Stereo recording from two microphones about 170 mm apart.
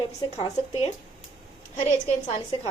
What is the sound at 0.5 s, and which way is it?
Speech, 40° left (ahead or behind).